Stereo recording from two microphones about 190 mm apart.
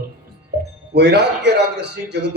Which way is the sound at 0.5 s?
60° right (ahead or behind).